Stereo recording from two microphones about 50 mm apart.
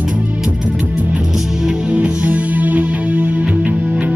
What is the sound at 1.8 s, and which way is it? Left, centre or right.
Music, right.